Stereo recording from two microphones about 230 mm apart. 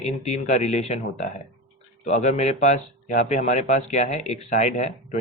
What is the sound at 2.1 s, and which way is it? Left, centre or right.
Speech, left.